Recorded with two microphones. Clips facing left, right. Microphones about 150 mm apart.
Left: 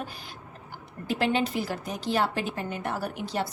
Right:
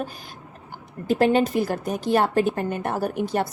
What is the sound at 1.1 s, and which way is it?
A woman's voice, 45° right (ahead or behind).